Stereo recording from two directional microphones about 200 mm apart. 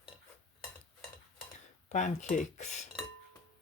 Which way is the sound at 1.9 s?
35° left (ahead or behind).